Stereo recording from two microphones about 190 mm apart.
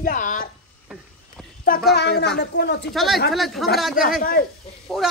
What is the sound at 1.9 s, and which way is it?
A woman's voice, 60° left (ahead or behind).